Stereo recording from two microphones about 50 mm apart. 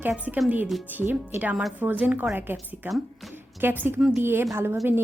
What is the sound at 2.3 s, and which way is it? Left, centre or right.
A woman's voice, right.